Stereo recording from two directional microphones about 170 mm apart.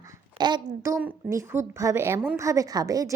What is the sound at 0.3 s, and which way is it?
A woman's voice, 25° right (ahead or behind).